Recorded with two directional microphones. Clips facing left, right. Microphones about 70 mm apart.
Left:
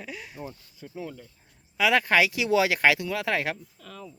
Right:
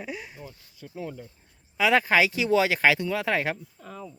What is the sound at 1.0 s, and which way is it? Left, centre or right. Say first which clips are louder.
Speech: right 4 dB; centre.